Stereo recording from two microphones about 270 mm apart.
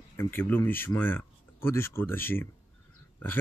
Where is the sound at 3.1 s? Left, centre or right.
Centre.